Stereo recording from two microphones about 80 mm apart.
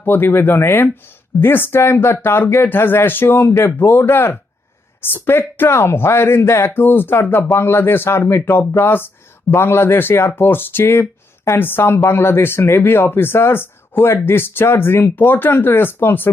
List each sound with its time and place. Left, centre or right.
0.0 s speech: left